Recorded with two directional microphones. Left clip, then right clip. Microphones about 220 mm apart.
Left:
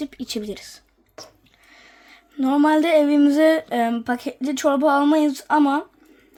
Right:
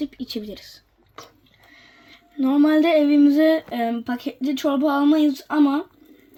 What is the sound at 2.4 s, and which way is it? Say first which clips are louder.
Speech: even; 20° left (ahead or behind).